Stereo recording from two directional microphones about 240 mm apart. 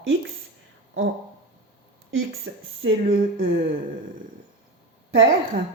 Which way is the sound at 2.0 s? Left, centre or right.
Right.